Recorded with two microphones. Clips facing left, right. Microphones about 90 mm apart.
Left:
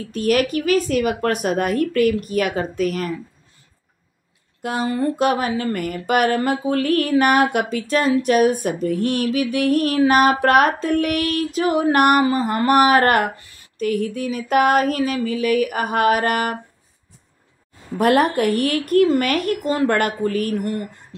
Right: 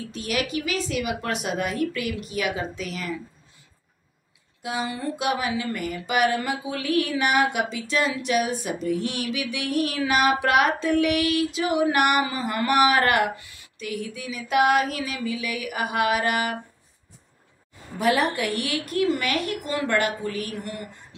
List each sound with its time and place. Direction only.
0.1 s speech: 45° left (ahead or behind)
4.6 s speech: 50° left (ahead or behind)
17.9 s speech: 55° left (ahead or behind)